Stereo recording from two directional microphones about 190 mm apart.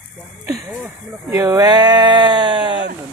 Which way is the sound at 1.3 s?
15° right (ahead or behind).